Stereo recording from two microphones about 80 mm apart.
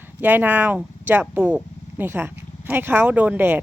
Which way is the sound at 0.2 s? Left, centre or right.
Right.